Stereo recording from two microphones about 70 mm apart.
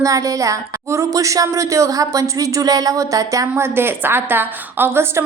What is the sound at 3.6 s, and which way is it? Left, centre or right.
Speech, right.